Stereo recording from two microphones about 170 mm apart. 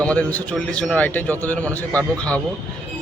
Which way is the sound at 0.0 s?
10° left (ahead or behind).